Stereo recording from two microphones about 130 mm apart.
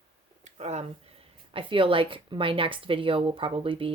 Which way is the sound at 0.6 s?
55° right (ahead or behind).